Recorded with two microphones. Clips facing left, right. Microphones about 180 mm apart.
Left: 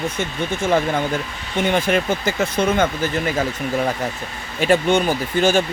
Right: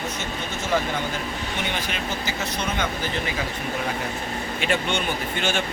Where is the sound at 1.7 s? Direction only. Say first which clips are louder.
Left 10 dB; 50° left (ahead or behind).